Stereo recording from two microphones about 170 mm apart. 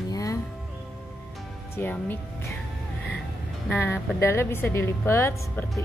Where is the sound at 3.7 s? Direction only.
15° left (ahead or behind).